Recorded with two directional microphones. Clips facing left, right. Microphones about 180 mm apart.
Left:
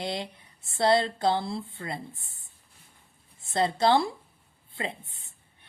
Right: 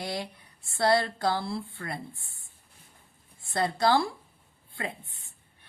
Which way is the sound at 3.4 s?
20° left (ahead or behind).